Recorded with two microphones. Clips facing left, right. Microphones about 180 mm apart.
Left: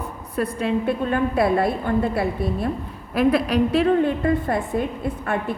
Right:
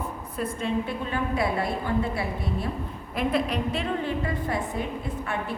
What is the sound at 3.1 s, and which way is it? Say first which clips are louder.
A woman's voice: left 7 dB; 70° left (ahead or behind).